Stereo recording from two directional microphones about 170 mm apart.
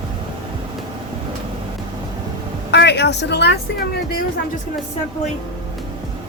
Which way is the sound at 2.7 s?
90° left.